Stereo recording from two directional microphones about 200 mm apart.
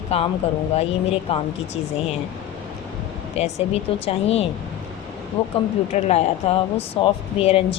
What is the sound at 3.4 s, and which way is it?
Speech, 30° left (ahead or behind).